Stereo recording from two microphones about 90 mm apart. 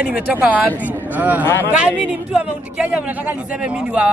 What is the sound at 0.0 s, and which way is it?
A man's voice, 15° right (ahead or behind).